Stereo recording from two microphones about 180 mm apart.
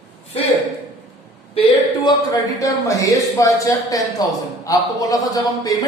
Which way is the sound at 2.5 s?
20° left (ahead or behind).